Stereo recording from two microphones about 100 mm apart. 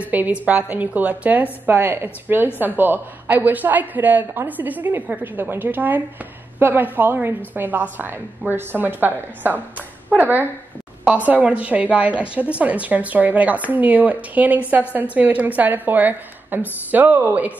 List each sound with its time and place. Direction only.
0.0 s a woman's voice: 15° right (ahead or behind)